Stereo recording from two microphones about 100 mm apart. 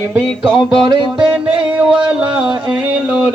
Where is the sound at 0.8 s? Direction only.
10° right (ahead or behind).